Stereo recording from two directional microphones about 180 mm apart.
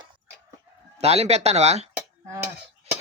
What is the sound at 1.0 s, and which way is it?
Speech, 35° right (ahead or behind).